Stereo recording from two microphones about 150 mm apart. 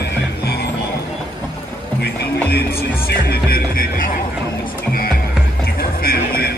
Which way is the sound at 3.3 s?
80° left.